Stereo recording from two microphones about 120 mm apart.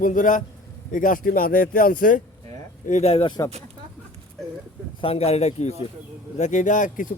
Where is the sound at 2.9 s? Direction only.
60° left (ahead or behind).